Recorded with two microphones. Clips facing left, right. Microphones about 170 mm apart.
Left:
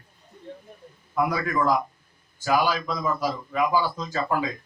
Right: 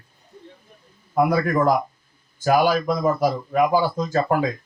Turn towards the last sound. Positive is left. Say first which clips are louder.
# right 6 dB
turn(degrees=-50)  # may be behind; listen again after turning